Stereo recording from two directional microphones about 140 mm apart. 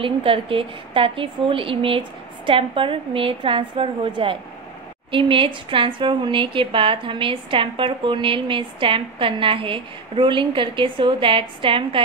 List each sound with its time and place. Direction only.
0.0 s a woman's voice: 40° right (ahead or behind)